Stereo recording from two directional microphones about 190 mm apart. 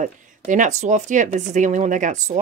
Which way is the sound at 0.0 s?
40° right (ahead or behind).